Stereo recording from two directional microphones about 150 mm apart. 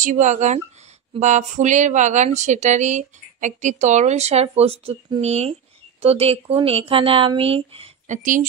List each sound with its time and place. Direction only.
0.0 s speech: 55° right (ahead or behind); by 8.2 s 40° right (ahead or behind)
8.2 s a woman's voice: 60° right (ahead or behind)